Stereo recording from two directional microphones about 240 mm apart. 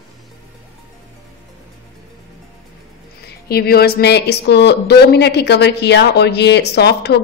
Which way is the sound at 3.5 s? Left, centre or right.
Left.